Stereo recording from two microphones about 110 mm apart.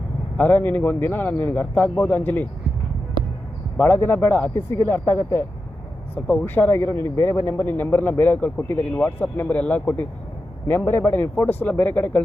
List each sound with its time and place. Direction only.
0.3 s a man's voice: 15° left (ahead or behind)
3.8 s a man's voice: 20° left (ahead or behind)